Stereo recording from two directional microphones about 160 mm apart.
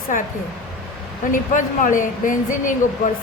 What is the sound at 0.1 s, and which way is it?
Speech, 55° left (ahead or behind).